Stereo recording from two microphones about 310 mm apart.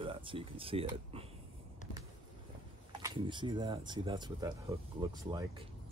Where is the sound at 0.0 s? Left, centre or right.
Centre.